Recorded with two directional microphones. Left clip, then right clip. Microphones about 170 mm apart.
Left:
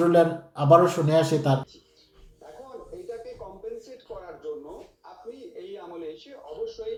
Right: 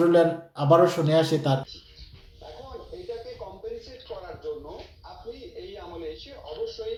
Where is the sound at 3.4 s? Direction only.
20° left (ahead or behind).